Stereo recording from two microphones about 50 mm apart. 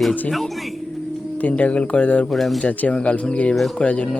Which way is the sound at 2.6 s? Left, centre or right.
Left.